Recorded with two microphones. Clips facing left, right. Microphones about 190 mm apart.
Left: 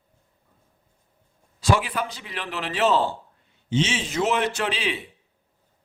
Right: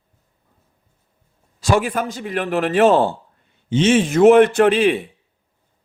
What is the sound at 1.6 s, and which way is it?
A man's voice, 45° right (ahead or behind).